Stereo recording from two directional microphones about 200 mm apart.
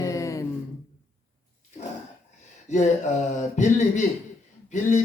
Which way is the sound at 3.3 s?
35° left (ahead or behind).